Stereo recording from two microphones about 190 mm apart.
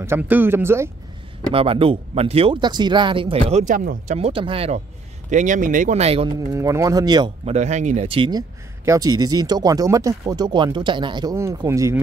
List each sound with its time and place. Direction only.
0.0 s speech: 10° right (ahead or behind)
1.5 s speech: 30° right (ahead or behind); by 4.2 s 45° right (ahead or behind)
4.2 s speech: 30° right (ahead or behind)
7.4 s speech: 40° right (ahead or behind)
8.2 s speech: 20° right (ahead or behind)